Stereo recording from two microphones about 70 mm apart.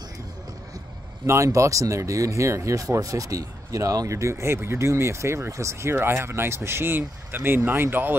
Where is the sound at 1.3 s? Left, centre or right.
Right.